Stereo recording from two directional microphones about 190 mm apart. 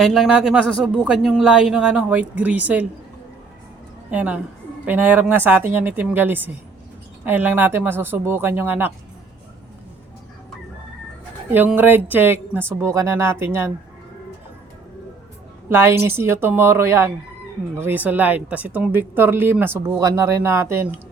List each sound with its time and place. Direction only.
0.0 s speech: centre (ahead or behind)
4.1 s speech: 5° right (ahead or behind)
11.5 s speech: 10° right (ahead or behind)
15.7 s speech: 10° right (ahead or behind)